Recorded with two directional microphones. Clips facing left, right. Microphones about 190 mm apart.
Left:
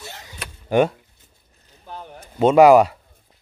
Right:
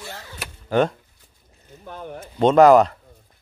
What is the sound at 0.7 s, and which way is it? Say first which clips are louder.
Speech: left 2 dB; 10° left (ahead or behind).